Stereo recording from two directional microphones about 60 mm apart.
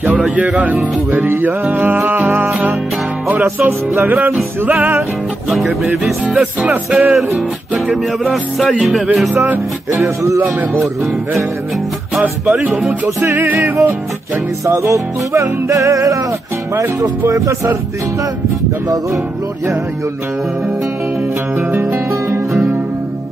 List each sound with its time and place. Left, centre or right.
0.4 s speech: right
3.5 s speech: right
5.5 s music: centre
6.2 s speech: right
7.7 s music: centre
8.3 s music: centre
9.8 s music: right
12.4 s speech: centre
13.0 s music: right
14.6 s music: right
21.8 s music: right